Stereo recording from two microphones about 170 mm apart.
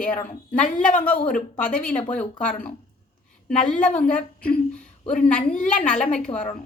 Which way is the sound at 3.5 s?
5° left (ahead or behind).